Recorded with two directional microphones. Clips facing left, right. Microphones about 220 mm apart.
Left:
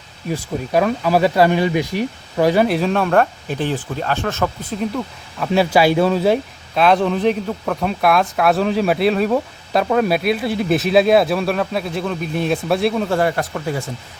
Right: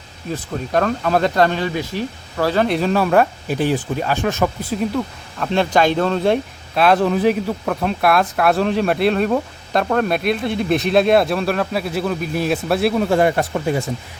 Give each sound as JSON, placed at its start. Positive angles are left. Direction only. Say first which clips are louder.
{"t": 0.3, "sound": "speech", "louder": "left 2 dB", "side_deg": 10}
{"t": 2.6, "sound": "speech", "louder": "even", "side_deg": 0}
{"t": 13.1, "sound": "speech", "louder": "right 3 dB", "side_deg": -20}